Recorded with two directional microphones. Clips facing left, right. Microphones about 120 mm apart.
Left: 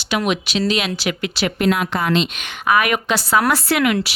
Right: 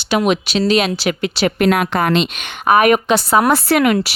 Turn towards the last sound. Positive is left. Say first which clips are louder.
# right 4 dB
turn(degrees=-40)  # may be behind; listen again after turning